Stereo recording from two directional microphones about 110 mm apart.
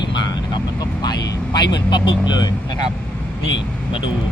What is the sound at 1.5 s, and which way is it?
Speech, 45° left (ahead or behind).